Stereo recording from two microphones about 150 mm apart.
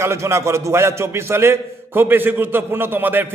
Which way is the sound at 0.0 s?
20° right (ahead or behind).